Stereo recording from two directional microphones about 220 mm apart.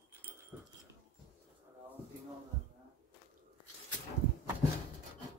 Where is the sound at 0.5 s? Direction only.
5° right (ahead or behind).